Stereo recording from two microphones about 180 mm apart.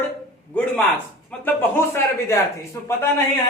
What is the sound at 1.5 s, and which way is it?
Speech, 15° left (ahead or behind).